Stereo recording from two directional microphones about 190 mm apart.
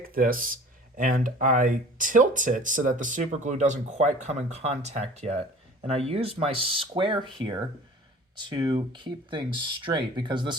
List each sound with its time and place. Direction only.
0.1 s speech: 50° right (ahead or behind); by 10.5 s 25° right (ahead or behind)